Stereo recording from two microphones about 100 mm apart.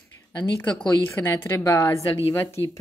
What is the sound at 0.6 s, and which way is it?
Speech, 15° left (ahead or behind).